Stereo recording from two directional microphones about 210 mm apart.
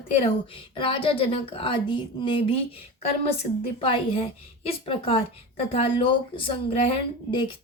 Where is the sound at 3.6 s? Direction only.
25° left (ahead or behind).